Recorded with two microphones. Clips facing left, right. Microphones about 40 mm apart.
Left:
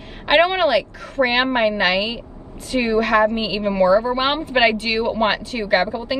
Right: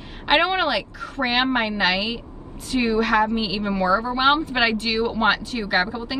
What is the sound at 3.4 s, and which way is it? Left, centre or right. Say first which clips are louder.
Speech: left 4 dB; left.